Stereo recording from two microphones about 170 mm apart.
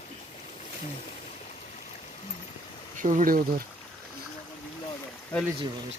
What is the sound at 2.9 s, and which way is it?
Speech, 50° right (ahead or behind).